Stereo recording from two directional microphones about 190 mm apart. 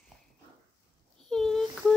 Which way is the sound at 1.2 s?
5° left (ahead or behind).